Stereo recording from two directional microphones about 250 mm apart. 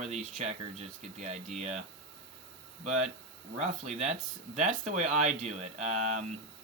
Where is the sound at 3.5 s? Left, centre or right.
Right.